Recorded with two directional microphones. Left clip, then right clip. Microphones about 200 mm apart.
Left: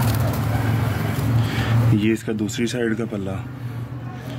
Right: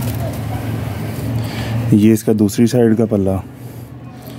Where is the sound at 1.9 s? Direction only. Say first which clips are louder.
Right 11 dB; 60° right (ahead or behind).